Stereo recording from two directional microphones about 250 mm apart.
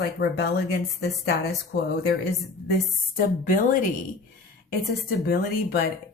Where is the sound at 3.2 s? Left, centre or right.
Left.